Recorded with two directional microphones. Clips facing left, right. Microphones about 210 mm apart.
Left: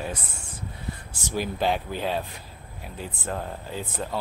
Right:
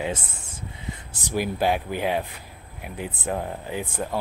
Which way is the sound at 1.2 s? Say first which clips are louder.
Right 2 dB; 10° right (ahead or behind).